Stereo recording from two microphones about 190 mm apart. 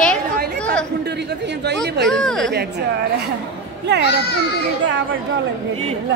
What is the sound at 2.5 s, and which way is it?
Speech, 60° right (ahead or behind).